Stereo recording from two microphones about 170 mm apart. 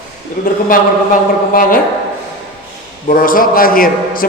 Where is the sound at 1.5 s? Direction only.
55° left (ahead or behind).